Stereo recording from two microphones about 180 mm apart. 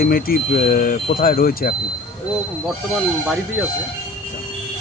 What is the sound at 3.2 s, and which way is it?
Speech, 5° right (ahead or behind).